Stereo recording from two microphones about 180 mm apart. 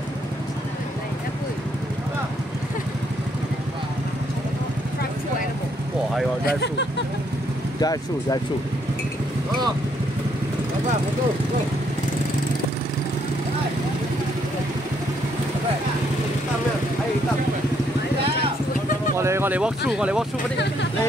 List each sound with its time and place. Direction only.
6.4 s speech: 70° left (ahead or behind)
7.8 s speech: 20° left (ahead or behind)
19.1 s vehicle: 15° right (ahead or behind)
19.9 s speech: 5° right (ahead or behind)